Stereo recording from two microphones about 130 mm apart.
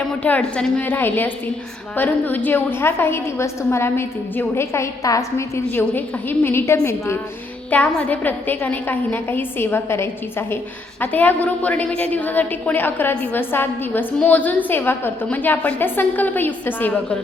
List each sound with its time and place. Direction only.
0.2 s a woman's voice: 10° left (ahead or behind)
7.7 s a woman's voice: 10° left (ahead or behind)